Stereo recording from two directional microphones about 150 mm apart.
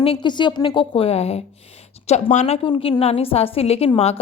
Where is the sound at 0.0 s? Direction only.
35° left (ahead or behind).